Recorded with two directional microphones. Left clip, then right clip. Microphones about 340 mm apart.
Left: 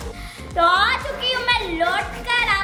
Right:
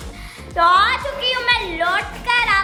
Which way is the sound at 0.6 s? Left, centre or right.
Centre.